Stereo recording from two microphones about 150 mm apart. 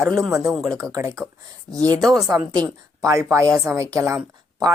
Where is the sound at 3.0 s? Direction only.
20° right (ahead or behind).